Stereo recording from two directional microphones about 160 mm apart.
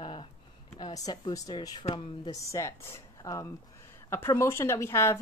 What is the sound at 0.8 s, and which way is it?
A woman's voice, 25° left (ahead or behind).